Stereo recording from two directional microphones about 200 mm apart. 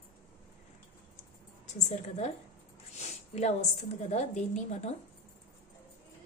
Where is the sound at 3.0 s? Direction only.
35° left (ahead or behind).